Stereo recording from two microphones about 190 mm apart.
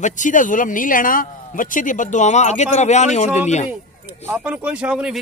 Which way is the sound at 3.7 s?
10° right (ahead or behind).